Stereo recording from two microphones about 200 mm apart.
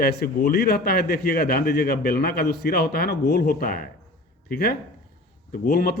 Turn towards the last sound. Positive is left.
turn(degrees=50)  # may be behind; listen again after turning